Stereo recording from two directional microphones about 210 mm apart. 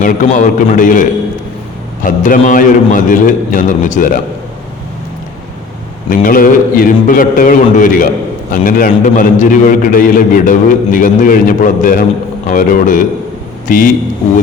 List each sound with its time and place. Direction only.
0.0 s a man's voice: 40° left (ahead or behind)
2.0 s a man's voice: 40° left (ahead or behind)
6.1 s a man's voice: 40° left (ahead or behind)